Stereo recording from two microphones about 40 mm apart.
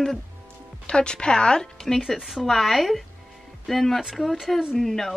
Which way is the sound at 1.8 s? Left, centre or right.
Centre.